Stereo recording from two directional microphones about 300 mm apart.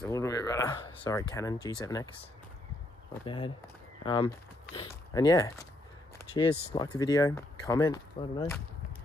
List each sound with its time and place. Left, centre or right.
0.0 s speech: centre
3.3 s speech: centre